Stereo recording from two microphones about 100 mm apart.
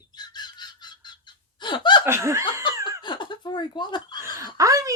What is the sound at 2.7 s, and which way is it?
Laughter, 50° left (ahead or behind).